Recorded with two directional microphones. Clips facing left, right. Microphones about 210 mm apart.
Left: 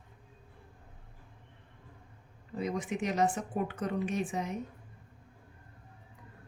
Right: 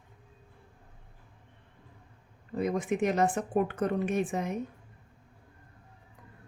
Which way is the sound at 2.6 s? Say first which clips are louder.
Right 5 dB; 55° right (ahead or behind).